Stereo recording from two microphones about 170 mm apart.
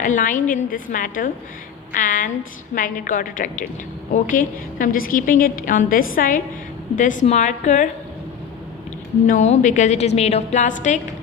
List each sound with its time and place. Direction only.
0.0 s a woman's voice: 50° left (ahead or behind)
9.2 s a woman's voice: 45° left (ahead or behind)